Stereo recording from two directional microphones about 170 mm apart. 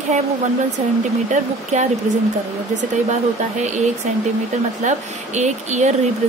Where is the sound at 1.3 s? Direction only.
45° right (ahead or behind).